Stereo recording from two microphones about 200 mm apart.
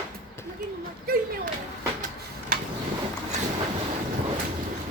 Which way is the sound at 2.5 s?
45° right (ahead or behind).